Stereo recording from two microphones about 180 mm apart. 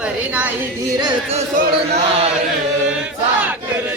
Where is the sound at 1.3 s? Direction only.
40° right (ahead or behind).